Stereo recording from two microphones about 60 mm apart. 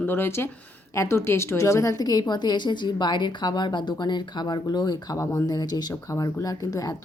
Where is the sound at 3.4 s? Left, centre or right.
Left.